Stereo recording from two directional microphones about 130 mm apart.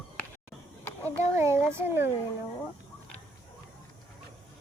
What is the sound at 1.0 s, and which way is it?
Speech, 20° right (ahead or behind).